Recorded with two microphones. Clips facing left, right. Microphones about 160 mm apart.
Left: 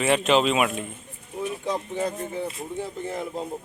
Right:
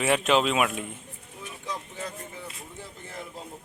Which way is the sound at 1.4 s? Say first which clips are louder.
Left 10 dB; 60° left (ahead or behind).